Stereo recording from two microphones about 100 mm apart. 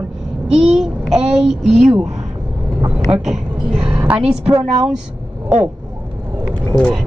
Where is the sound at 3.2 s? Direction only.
5° right (ahead or behind).